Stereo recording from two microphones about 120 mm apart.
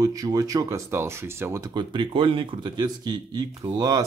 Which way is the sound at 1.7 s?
45° right (ahead or behind).